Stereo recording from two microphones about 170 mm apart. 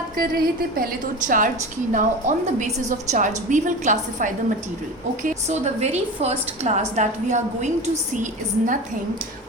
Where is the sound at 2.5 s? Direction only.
45° right (ahead or behind).